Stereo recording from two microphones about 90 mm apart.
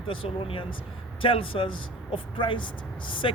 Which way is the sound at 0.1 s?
85° left.